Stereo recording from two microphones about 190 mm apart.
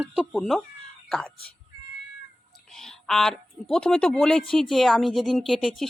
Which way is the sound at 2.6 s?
5° left (ahead or behind).